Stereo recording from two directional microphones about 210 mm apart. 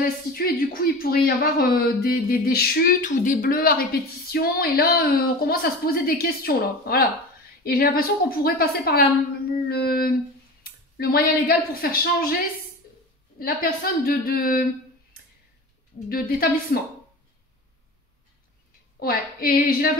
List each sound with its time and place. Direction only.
0.3 s speech: 45° left (ahead or behind)
9.7 s a sound: 45° left (ahead or behind)
10.6 s a woman's voice: 45° left (ahead or behind)
13.4 s speech: 45° left (ahead or behind)
16.1 s speech: 45° left (ahead or behind)
18.9 s speech: 45° left (ahead or behind)